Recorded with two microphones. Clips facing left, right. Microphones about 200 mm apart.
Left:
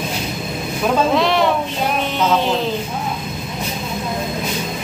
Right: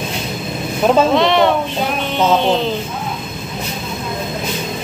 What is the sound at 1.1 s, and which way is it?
Speech, centre (ahead or behind).